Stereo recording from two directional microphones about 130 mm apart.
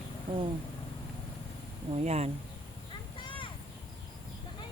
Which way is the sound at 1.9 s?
55° right (ahead or behind).